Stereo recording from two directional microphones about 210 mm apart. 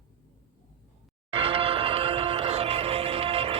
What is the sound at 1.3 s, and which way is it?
Music, 25° right (ahead or behind).